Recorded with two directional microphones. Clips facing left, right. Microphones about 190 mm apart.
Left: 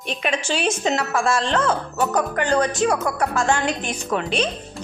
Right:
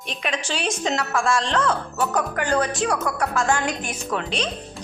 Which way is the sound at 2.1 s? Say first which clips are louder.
Left 2 dB; 20° left (ahead or behind).